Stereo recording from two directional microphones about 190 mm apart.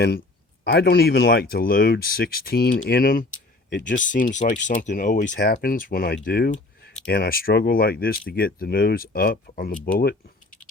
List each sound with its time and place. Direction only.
0.6 s speech: 60° left (ahead or behind)